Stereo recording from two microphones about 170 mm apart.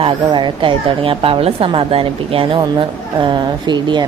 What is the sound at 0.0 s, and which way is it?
A woman's voice, 30° right (ahead or behind).